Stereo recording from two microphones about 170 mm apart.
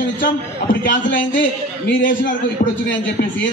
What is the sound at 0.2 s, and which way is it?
A man's voice, 50° left (ahead or behind).